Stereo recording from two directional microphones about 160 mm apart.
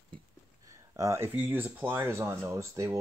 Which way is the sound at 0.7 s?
20° right (ahead or behind).